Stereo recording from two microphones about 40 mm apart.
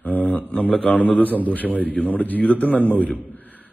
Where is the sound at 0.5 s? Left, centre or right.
Left.